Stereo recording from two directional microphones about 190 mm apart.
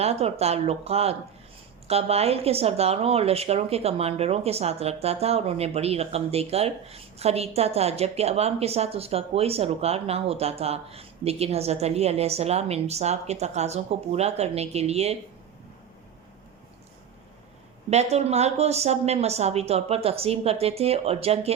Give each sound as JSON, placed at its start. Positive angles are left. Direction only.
{"t": 0.0, "sound": "speech", "side_deg": -35}
{"t": 17.9, "sound": "speech", "side_deg": -35}